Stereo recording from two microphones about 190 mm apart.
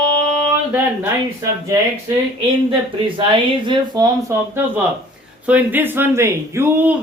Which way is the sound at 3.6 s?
20° right (ahead or behind).